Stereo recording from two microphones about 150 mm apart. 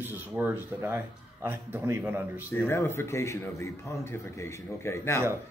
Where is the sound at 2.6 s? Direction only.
15° left (ahead or behind).